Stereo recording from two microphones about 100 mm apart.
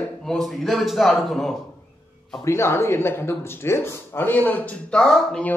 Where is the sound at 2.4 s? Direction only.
25° left (ahead or behind).